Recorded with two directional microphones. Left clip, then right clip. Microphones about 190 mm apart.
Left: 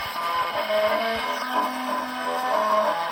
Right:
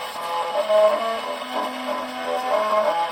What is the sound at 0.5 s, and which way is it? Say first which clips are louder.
Music: right 9 dB; 25° right (ahead or behind).